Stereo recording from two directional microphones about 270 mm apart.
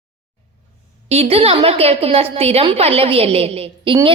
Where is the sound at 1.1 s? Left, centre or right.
Right.